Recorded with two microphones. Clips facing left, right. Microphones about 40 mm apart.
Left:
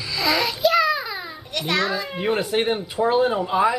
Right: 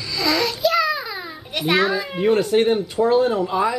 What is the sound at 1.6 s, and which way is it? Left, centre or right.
Speech, centre.